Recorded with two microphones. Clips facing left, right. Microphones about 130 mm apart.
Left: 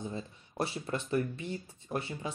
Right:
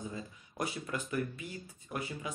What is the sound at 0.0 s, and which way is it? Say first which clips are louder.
Speech: left 3 dB; 30° left (ahead or behind).